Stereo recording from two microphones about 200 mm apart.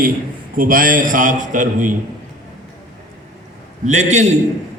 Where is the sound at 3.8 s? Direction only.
35° right (ahead or behind).